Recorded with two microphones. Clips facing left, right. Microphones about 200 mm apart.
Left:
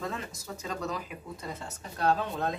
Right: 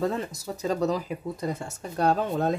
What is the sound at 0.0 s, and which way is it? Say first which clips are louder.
Speech: right 9 dB; 35° right (ahead or behind).